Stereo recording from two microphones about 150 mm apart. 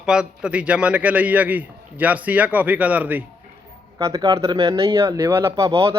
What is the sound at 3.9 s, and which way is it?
Speech, 25° right (ahead or behind).